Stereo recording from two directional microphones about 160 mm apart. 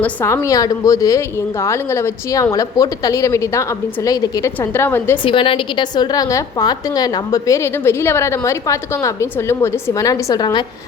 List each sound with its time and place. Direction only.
0.0 s a woman's voice: 15° left (ahead or behind)
5.2 s a woman's voice: 30° left (ahead or behind)